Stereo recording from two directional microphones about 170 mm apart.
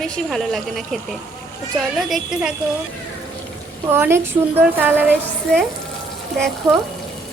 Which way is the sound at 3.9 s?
15° right (ahead or behind).